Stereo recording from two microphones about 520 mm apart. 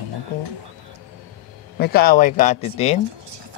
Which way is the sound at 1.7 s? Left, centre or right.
Centre.